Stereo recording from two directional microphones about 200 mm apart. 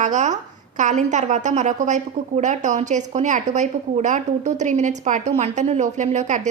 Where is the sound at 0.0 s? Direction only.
35° right (ahead or behind).